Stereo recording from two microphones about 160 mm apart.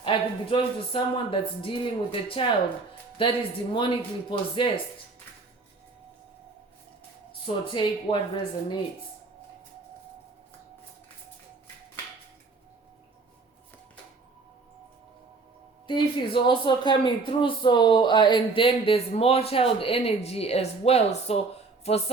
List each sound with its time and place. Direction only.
0.0 s speech: 30° left (ahead or behind)
7.4 s speech: 30° left (ahead or behind)
15.9 s speech: 30° left (ahead or behind)